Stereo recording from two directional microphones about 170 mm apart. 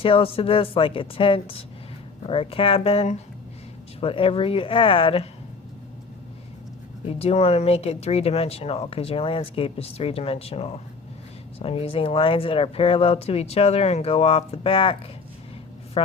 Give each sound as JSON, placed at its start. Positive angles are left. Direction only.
{"t": 0.0, "sound": "speech", "side_deg": 35}
{"t": 7.0, "sound": "speech", "side_deg": 35}